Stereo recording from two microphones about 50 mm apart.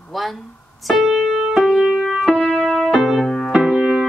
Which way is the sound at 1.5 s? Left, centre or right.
Centre.